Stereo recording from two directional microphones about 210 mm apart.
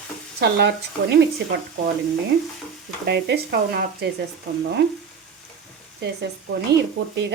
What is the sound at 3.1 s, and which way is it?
Speech, 50° right (ahead or behind).